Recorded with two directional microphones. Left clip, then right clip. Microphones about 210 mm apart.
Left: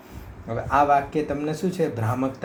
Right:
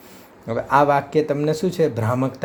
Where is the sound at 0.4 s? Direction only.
55° right (ahead or behind).